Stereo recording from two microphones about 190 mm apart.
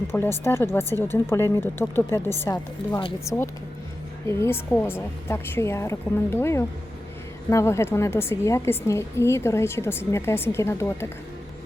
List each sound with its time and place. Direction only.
0.1 s a woman's voice: 15° left (ahead or behind)